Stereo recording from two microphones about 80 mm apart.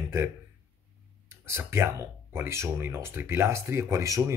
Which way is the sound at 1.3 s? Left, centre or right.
Right.